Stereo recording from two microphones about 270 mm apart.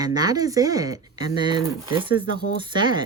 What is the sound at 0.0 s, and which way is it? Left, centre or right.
Speech, centre.